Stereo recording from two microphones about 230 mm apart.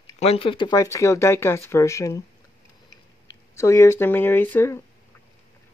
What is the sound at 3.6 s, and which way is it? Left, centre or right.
Speech, centre.